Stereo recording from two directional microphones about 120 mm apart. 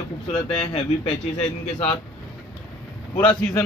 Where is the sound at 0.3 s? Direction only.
5° left (ahead or behind).